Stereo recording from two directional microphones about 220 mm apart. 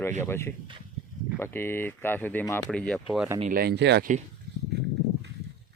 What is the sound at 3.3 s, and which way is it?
Speech, 40° right (ahead or behind).